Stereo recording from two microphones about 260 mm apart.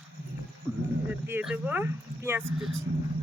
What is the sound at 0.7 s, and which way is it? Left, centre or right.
Speech, centre.